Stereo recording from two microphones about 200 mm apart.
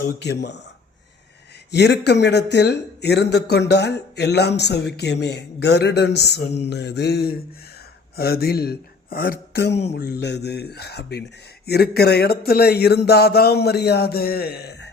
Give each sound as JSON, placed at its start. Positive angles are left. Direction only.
{"t": 0.0, "sound": "speech", "side_deg": 55}
{"t": 1.7, "sound": "speech", "side_deg": 55}